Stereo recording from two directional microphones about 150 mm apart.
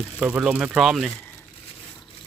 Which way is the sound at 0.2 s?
5° right (ahead or behind).